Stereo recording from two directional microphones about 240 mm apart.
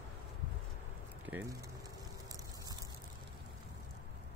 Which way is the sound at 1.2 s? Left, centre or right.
Centre.